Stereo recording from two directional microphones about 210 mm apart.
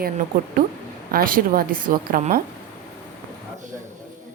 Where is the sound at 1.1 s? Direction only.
40° right (ahead or behind).